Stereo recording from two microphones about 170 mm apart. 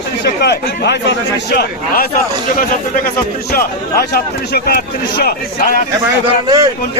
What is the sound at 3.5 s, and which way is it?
Speech, 65° left (ahead or behind).